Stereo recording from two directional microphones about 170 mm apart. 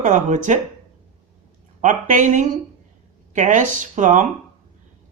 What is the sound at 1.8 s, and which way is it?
Speech, 45° right (ahead or behind).